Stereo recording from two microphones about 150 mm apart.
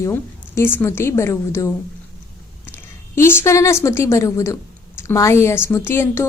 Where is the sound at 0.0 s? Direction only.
15° left (ahead or behind).